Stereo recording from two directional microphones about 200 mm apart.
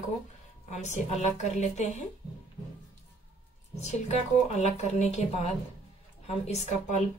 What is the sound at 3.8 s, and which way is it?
A woman's voice, 35° left (ahead or behind).